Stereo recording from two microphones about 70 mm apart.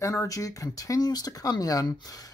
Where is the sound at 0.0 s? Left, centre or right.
Left.